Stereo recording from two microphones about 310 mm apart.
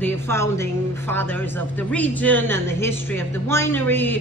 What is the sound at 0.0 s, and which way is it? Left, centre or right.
A woman's voice, centre.